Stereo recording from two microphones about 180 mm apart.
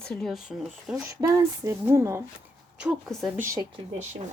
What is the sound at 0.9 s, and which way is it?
Speech, 20° right (ahead or behind).